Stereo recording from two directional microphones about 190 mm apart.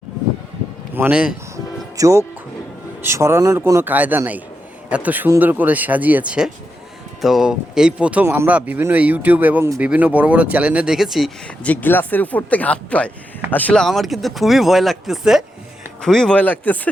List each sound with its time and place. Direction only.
0.9 s speech: 5° right (ahead or behind)
2.0 s speech: 15° right (ahead or behind); by 16.9 s 10° left (ahead or behind)